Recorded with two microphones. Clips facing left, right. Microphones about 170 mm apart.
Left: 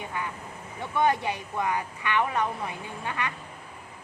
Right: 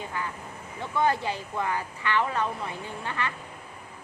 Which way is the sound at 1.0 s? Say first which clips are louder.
Left 1 dB; 20° left (ahead or behind).